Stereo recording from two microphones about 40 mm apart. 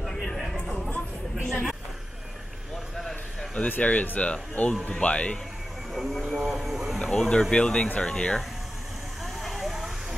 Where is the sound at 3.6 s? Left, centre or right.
Left.